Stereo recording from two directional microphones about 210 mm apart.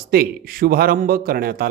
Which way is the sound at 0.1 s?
45° right (ahead or behind).